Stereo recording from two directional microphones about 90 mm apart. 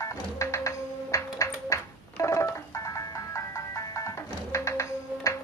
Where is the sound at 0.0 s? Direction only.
35° left (ahead or behind).